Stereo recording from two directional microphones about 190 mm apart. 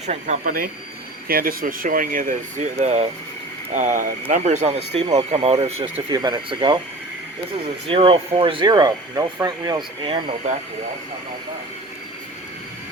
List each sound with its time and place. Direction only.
0.1 s speech: 45° right (ahead or behind)
6.1 s speech: 20° right (ahead or behind)
7.9 s speech: 30° right (ahead or behind)